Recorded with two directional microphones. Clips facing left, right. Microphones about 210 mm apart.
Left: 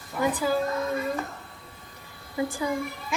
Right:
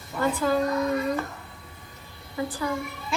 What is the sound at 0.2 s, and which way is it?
Speech, 15° left (ahead or behind).